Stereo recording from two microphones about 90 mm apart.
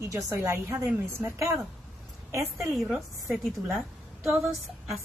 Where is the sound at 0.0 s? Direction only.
35° right (ahead or behind).